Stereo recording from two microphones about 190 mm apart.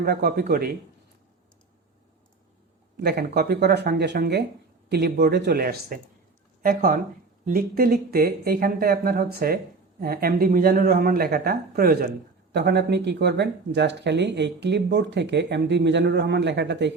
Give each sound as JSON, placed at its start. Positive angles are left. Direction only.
{"t": 0.0, "sound": "speech", "side_deg": -60}
{"t": 3.0, "sound": "speech", "side_deg": -60}